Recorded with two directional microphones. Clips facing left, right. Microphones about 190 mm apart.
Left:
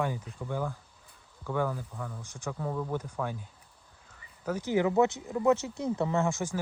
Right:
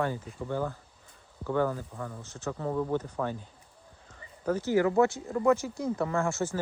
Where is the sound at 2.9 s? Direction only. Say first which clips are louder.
Right 4 dB; 10° left (ahead or behind).